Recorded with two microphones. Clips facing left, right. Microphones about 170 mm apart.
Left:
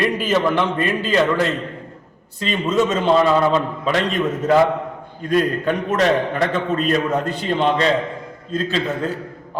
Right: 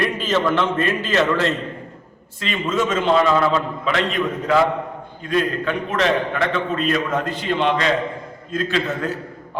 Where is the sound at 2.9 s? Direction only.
35° left (ahead or behind).